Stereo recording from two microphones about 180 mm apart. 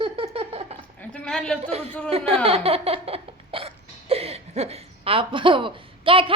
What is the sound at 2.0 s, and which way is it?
A woman's voice, 35° right (ahead or behind).